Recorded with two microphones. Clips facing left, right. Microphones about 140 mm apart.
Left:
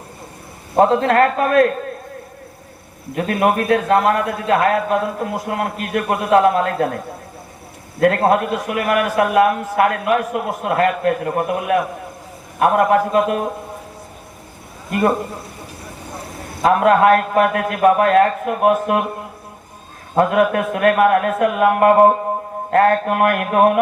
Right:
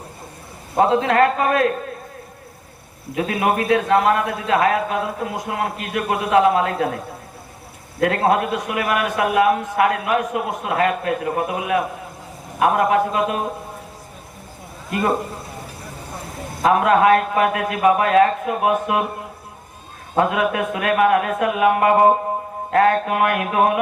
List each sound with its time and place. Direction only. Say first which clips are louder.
0.8 s a man's voice: left 2 dB; 50° left (ahead or behind)
3.2 s a man's voice: left 3 dB; 50° left (ahead or behind)
8.0 s a man's voice: left 3 dB; 50° left (ahead or behind)
14.8 s a man's voice: left 4 dB; 50° left (ahead or behind)
16.8 s a man's voice: left 3 dB; 50° left (ahead or behind)
20.1 s a man's voice: left 4 dB; 50° left (ahead or behind)